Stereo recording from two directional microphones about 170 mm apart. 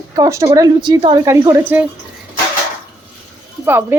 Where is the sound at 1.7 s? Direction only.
10° right (ahead or behind).